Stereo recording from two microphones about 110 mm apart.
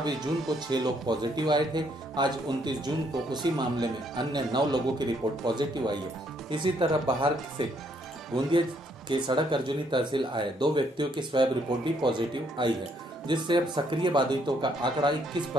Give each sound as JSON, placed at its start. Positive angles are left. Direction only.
{"t": 0.5, "sound": "speech", "side_deg": -40}
{"t": 9.1, "sound": "speech", "side_deg": -45}